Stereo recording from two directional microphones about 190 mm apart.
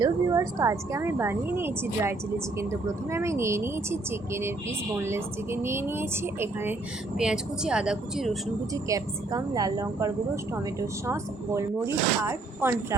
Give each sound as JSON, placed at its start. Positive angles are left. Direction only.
{"t": 0.0, "sound": "speech", "side_deg": -20}
{"t": 8.7, "sound": "speech", "side_deg": -20}